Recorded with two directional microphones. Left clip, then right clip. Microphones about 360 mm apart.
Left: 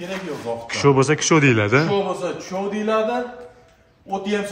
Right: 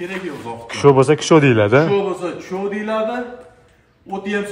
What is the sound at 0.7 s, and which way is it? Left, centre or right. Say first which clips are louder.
Speech: right 5 dB; centre.